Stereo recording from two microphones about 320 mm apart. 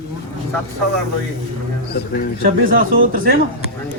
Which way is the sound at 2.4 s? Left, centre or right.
Right.